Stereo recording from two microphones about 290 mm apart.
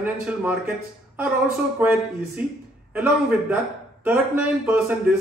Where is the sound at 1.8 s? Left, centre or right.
Centre.